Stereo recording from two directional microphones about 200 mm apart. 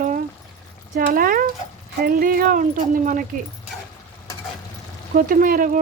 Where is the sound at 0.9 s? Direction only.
45° right (ahead or behind).